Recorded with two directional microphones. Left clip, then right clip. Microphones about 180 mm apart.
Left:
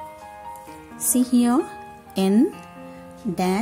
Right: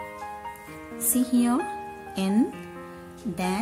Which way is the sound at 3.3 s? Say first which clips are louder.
Left 6 dB; 35° left (ahead or behind).